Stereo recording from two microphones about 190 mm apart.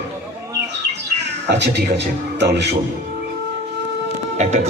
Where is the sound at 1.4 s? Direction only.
65° right (ahead or behind).